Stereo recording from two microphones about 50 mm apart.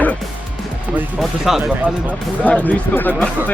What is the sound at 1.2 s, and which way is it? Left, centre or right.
Speech, centre.